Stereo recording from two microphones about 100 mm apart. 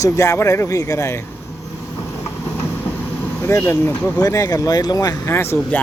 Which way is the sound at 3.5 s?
30° left (ahead or behind).